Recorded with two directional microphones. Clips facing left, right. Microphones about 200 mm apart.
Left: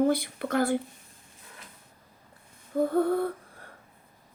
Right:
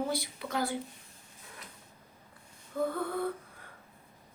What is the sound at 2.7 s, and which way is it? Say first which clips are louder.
Speech: left 6 dB; 50° left (ahead or behind).